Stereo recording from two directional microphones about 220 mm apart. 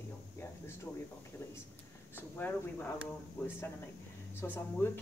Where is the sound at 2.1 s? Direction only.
10° left (ahead or behind).